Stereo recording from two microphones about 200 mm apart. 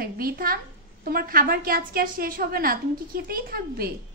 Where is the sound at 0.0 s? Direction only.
45° right (ahead or behind).